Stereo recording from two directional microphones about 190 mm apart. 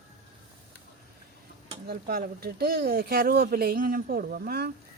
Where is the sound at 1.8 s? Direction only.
50° right (ahead or behind).